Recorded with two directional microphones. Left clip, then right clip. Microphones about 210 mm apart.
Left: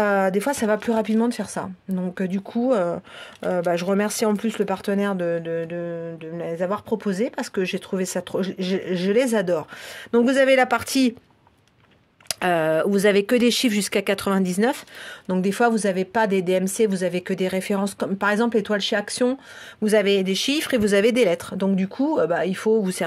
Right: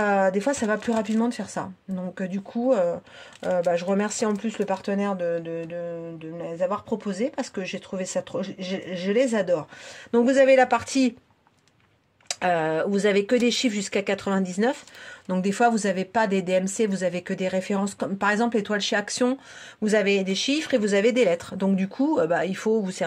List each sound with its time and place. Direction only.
0.0 s speech: 35° left (ahead or behind)
10.1 s speech: 35° left (ahead or behind)
12.3 s speech: 45° left (ahead or behind)
15.2 s speech: 25° left (ahead or behind)
19.8 s speech: 30° left (ahead or behind)